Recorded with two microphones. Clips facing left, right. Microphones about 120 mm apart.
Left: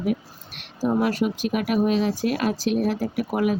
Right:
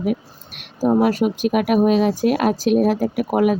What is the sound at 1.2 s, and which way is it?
Speech, 55° right (ahead or behind).